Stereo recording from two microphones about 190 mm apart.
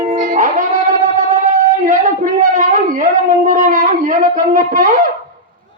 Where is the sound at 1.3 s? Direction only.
40° right (ahead or behind).